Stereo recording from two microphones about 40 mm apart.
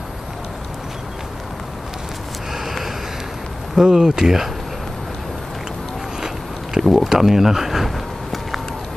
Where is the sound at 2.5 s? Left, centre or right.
Centre.